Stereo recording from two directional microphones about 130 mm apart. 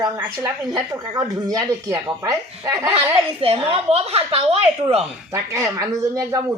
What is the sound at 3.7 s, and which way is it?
A woman's voice, 50° right (ahead or behind).